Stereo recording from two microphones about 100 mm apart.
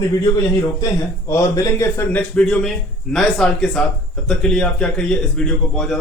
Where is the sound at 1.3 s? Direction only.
30° left (ahead or behind).